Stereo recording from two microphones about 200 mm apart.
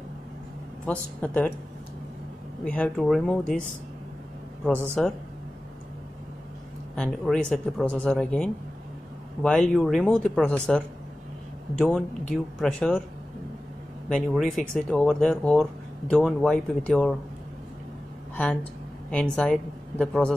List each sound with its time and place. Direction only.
0.8 s speech: 5° left (ahead or behind)
2.6 s speech: 5° left (ahead or behind)
5.0 s speech: 5° left (ahead or behind)
7.0 s speech: 5° left (ahead or behind)
11.8 s speech: centre (ahead or behind)
14.0 s speech: centre (ahead or behind)
18.3 s speech: 5° left (ahead or behind)